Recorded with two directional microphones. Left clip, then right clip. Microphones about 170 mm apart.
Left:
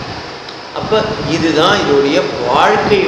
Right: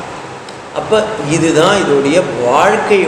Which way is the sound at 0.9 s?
40° right (ahead or behind).